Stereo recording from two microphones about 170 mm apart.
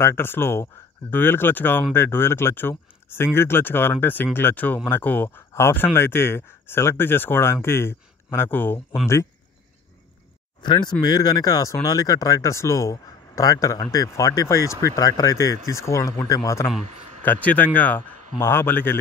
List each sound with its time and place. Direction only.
0.0 s speech: 15° left (ahead or behind)
10.6 s speech: 25° left (ahead or behind)